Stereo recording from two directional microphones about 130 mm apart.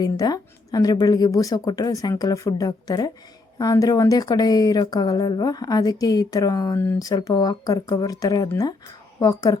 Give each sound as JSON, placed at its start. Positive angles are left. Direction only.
{"t": 0.0, "sound": "speech", "side_deg": 30}
{"t": 6.7, "sound": "speech", "side_deg": 15}
{"t": 7.0, "sound": "speech", "side_deg": 30}